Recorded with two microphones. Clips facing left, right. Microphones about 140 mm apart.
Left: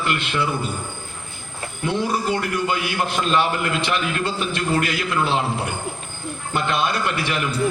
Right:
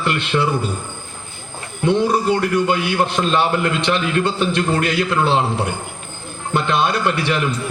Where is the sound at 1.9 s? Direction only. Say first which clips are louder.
Right 6 dB; 30° right (ahead or behind).